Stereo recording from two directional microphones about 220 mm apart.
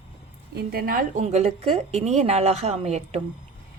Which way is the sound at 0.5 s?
45° right (ahead or behind).